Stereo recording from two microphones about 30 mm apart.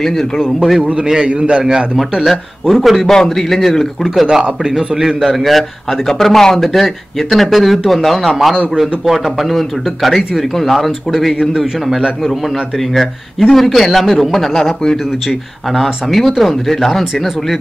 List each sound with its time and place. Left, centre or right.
1.2 s a man's voice: right
2.7 s speech: centre
3.1 s speech: centre
4.3 s a man's voice: centre
5.3 s a man's voice: centre
11.3 s a man's voice: centre
12.9 s speech: centre
14.3 s speech: centre
15.7 s speech: centre